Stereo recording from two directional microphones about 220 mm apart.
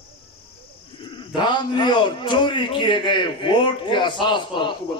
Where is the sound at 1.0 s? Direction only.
20° left (ahead or behind).